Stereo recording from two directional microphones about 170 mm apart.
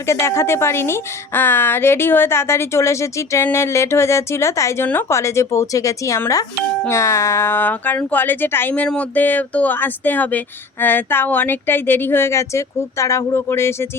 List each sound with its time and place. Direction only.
0.1 s speech: 15° left (ahead or behind)